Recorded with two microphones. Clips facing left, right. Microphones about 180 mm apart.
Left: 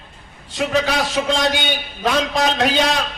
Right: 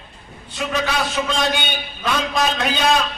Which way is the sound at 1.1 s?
70° left (ahead or behind).